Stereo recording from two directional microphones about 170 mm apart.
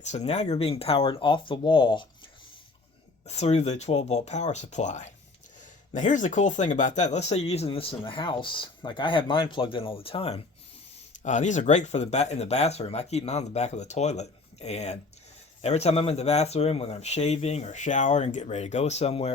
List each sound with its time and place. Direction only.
0.3 s speech: 40° left (ahead or behind)
3.2 s speech: 40° left (ahead or behind)